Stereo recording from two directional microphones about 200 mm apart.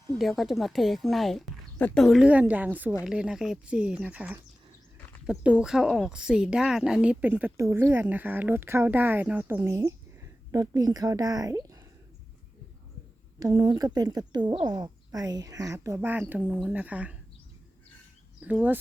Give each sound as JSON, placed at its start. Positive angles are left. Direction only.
{"t": 0.2, "sound": "speech", "side_deg": 0}
{"t": 13.4, "sound": "speech", "side_deg": -20}
{"t": 18.4, "sound": "speech", "side_deg": -5}